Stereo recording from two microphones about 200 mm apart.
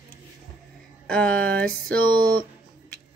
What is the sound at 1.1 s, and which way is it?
Speech, 5° left (ahead or behind).